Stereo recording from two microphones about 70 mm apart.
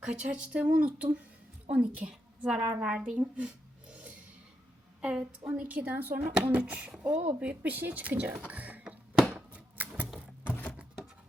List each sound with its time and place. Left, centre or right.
0.0 s a woman's voice: centre
8.4 s music: right
9.7 s typewriter: right
10.2 s a sound: left